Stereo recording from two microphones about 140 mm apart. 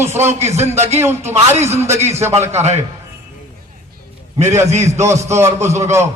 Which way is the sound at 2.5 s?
50° right (ahead or behind).